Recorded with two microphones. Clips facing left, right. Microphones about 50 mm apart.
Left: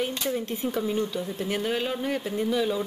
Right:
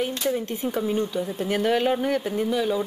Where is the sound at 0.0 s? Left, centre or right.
Centre.